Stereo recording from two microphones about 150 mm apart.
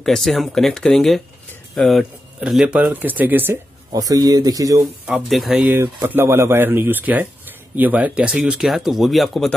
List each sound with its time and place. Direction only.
0.0 s speech: centre (ahead or behind)
3.9 s speech: 25° right (ahead or behind)
5.0 s speech: 5° right (ahead or behind)